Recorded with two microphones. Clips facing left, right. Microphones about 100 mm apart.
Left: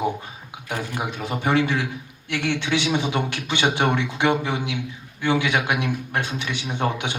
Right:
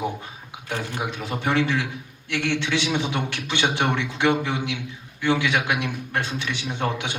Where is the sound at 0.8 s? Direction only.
20° left (ahead or behind).